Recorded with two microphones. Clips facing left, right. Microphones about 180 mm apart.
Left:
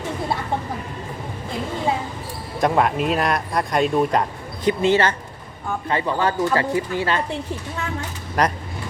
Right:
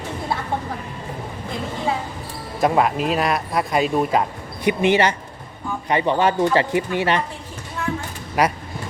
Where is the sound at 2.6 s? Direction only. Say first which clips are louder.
Right 1 dB; centre (ahead or behind).